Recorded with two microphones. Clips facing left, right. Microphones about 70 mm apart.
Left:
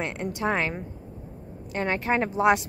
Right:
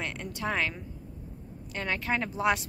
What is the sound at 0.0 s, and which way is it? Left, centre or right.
Speech, left.